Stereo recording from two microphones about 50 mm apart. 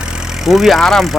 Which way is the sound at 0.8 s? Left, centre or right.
Centre.